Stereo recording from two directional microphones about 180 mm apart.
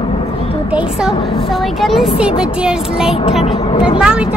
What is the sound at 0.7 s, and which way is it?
A woman's voice, 5° right (ahead or behind).